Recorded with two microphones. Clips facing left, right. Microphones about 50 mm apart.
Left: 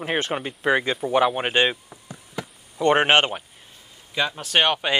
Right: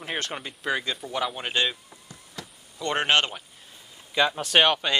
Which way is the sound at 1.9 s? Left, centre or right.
Left.